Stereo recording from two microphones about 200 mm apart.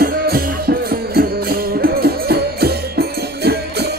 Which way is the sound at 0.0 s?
50° right (ahead or behind).